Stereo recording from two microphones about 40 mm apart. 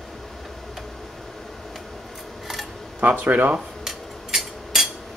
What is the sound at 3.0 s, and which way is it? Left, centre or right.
Speech, right.